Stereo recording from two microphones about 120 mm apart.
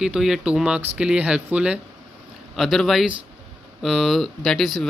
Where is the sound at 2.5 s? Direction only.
Centre (ahead or behind).